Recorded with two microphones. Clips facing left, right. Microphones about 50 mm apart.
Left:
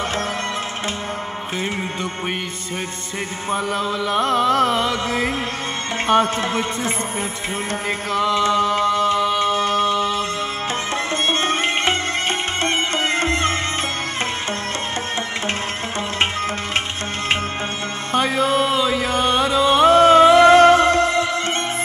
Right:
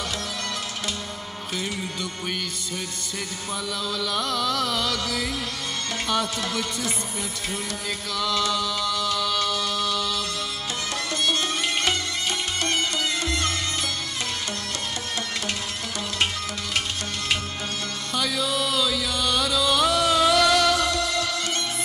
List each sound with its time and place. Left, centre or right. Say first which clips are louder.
3.4 s music: left 9 dB; left
8.1 s mantra: left 7 dB; left
11.2 s music: left 5 dB; left
18.1 s chant: left 8 dB; left